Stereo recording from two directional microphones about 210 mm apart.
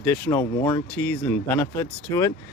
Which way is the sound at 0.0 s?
10° left (ahead or behind).